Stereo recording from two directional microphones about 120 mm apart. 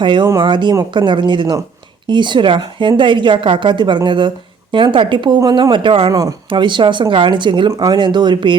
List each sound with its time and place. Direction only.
0.0 s a woman's voice: 40° right (ahead or behind)
5.4 s a woman's voice: 30° right (ahead or behind)
6.1 s speech: 30° right (ahead or behind)
6.5 s a woman's voice: 40° right (ahead or behind)